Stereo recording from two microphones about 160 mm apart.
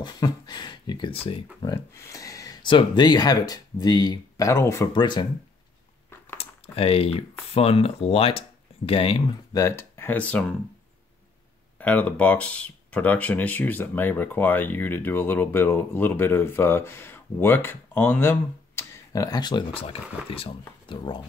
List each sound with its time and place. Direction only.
0.0 s speech: 25° left (ahead or behind)
1.6 s speech: 20° left (ahead or behind)
4.9 s speech: 30° left (ahead or behind)
6.3 s speech: 40° left (ahead or behind); by 10.4 s 10° left (ahead or behind)
11.8 s speech: 10° left (ahead or behind); by 21.2 s 30° left (ahead or behind)